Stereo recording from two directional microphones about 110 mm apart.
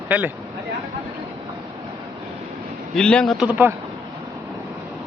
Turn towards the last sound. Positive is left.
turn(degrees=-15)  # may be behind; listen again after turning